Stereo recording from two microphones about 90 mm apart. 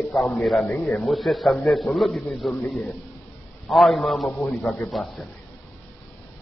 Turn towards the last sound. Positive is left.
turn(degrees=5)  # may be behind; listen again after turning